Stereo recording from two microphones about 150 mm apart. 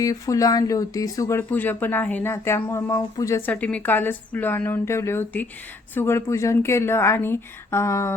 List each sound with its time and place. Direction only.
0.0 s speech: 25° left (ahead or behind)